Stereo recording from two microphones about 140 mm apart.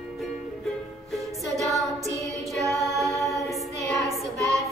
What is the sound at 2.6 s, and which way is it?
Female singing, 20° right (ahead or behind).